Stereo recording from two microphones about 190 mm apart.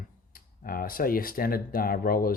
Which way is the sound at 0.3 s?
50° left (ahead or behind).